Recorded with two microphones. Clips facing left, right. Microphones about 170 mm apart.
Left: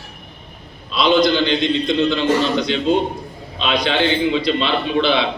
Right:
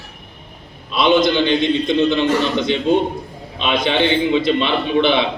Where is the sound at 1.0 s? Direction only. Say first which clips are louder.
Right 1 dB; 20° right (ahead or behind).